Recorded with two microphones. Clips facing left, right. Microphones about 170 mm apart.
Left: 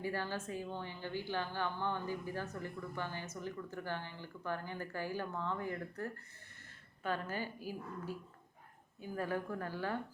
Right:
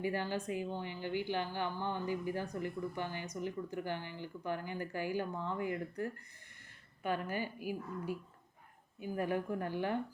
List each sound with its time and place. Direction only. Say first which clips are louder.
0.0 s a woman's voice: right 3 dB; 15° right (ahead or behind)